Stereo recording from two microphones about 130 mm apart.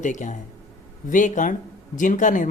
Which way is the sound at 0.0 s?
75° left (ahead or behind).